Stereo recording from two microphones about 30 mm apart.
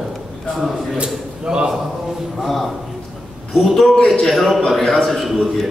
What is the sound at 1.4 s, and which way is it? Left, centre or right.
Speech, right.